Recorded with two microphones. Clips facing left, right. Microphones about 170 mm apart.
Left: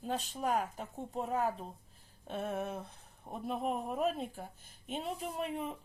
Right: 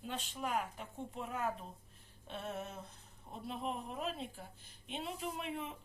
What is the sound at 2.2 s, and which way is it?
Speech, 50° left (ahead or behind).